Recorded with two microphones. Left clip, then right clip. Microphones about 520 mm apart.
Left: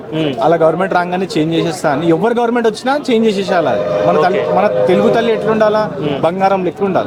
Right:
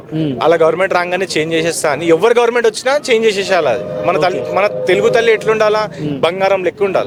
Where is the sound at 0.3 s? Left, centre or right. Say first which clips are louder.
Right 1 dB; right.